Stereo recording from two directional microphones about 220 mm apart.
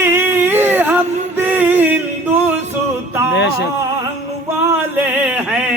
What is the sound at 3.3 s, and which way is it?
Speech, 50° left (ahead or behind).